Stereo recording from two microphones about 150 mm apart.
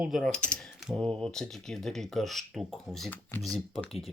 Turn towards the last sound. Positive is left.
turn(degrees=0)  # may be behind; listen again after turning